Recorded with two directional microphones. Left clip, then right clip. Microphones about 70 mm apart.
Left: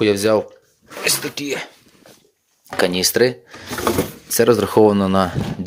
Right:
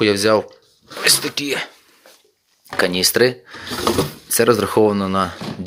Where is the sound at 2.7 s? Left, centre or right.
Left.